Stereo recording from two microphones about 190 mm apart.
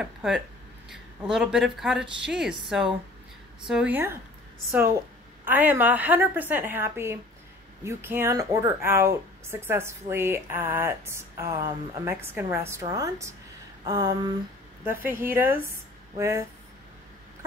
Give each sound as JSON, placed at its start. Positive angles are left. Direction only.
{"t": 0.0, "sound": "a woman's voice", "side_deg": 0}
{"t": 3.6, "sound": "a woman's voice", "side_deg": -5}
{"t": 13.8, "sound": "a sound", "side_deg": -20}
{"t": 15.0, "sound": "a woman's voice", "side_deg": -10}